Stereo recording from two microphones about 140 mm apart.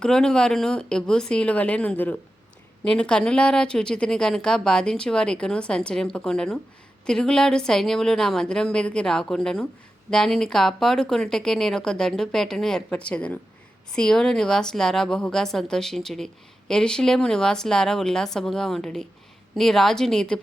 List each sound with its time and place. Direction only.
0.0 s speech: 5° left (ahead or behind)